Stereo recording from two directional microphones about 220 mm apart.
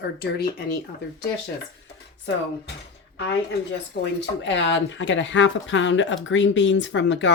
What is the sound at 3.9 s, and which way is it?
Speech, 45° left (ahead or behind).